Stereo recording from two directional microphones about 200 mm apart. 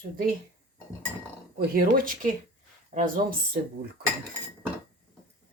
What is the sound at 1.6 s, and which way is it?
Speech, 45° right (ahead or behind).